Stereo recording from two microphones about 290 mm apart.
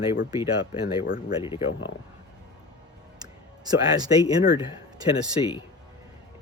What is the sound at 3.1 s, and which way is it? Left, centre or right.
Speech, centre.